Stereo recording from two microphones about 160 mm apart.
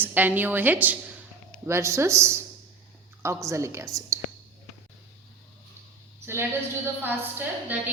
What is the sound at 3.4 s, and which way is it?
Speech, 20° right (ahead or behind).